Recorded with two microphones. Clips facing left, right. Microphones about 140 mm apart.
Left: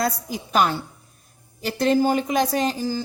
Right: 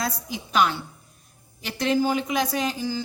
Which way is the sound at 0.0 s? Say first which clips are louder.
Left 5 dB; 45° left (ahead or behind).